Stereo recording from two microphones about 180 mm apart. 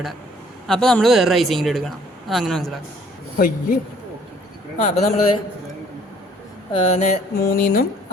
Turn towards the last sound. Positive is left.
turn(degrees=50)  # may be behind; listen again after turning